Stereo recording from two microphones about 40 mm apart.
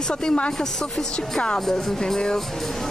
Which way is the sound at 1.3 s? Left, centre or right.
Centre.